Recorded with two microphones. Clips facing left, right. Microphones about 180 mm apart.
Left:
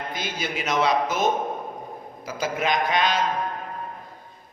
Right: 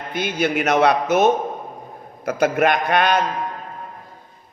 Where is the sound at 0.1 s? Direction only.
65° right (ahead or behind).